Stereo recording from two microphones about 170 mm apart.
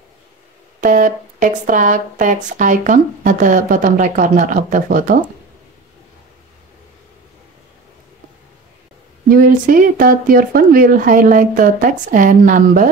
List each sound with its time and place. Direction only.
0.7 s speech: 50° right (ahead or behind)
9.3 s speech: 55° right (ahead or behind)